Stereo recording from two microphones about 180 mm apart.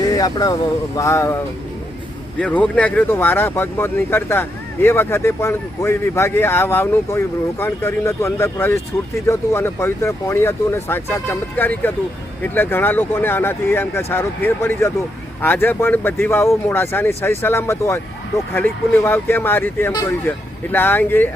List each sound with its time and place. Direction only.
0.0 s a sound: 20° left (ahead or behind)
0.9 s speech: 15° left (ahead or behind)
2.4 s speech: 5° left (ahead or behind)